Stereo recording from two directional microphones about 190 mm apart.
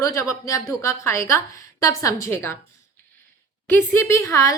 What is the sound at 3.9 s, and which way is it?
Speech, 15° left (ahead or behind).